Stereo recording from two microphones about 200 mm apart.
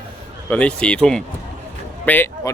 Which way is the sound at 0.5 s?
5° left (ahead or behind).